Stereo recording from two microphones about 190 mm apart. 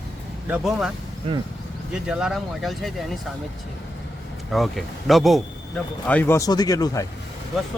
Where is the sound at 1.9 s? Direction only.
5° right (ahead or behind).